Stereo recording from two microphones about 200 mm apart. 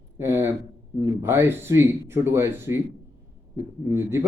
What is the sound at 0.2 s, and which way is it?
A man's voice, 10° right (ahead or behind).